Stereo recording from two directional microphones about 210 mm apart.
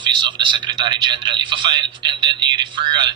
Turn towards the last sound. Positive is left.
turn(degrees=-20)  # may be behind; listen again after turning